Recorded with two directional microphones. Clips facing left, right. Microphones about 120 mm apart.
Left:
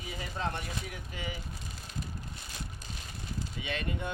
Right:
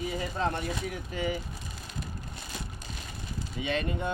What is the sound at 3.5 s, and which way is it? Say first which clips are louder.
Speech: right 7 dB; 30° right (ahead or behind).